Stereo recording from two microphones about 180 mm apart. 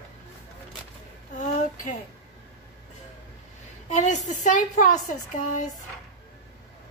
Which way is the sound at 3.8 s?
40° left (ahead or behind).